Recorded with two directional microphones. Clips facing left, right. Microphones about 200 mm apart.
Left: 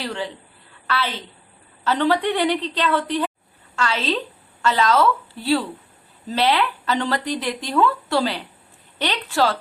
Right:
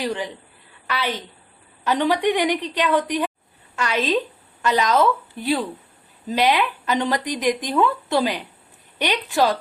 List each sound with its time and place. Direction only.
0.0 s speech: 15° right (ahead or behind)
0.7 s a sound: 15° right (ahead or behind)
1.8 s speech: 15° right (ahead or behind)